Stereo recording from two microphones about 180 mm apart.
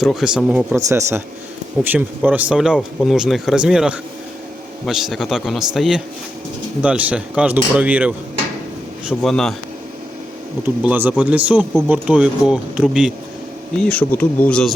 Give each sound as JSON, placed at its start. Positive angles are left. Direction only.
{"t": 0.0, "sound": "speech", "side_deg": 0}
{"t": 0.8, "sound": "speech", "side_deg": -15}
{"t": 10.8, "sound": "speech", "side_deg": -10}
{"t": 13.8, "sound": "speech", "side_deg": 10}